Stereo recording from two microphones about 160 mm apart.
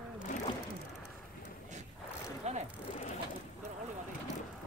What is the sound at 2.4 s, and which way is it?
Vehicle, 45° right (ahead or behind).